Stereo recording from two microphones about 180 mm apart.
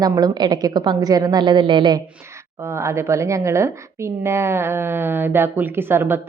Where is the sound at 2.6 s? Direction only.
15° right (ahead or behind).